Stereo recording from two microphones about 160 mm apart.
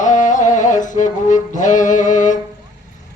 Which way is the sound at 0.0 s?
50° left (ahead or behind).